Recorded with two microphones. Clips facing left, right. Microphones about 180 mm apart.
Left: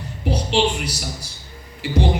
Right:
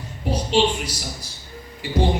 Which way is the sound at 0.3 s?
70° left (ahead or behind).